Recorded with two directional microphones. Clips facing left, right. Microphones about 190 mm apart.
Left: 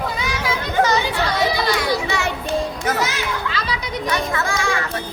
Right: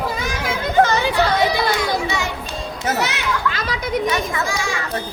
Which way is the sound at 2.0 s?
60° left (ahead or behind).